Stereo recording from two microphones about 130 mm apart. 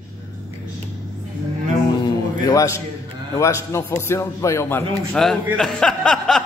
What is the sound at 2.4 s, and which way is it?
A man's voice, 25° left (ahead or behind).